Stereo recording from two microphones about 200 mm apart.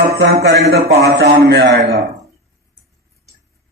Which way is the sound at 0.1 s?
50° right (ahead or behind).